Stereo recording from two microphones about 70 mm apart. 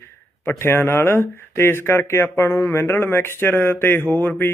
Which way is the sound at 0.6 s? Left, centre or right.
Left.